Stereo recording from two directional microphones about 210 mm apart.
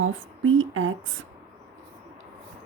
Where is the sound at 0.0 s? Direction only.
70° right (ahead or behind).